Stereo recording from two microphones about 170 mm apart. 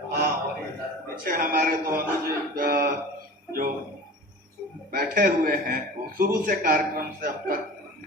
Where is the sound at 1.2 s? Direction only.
55° right (ahead or behind).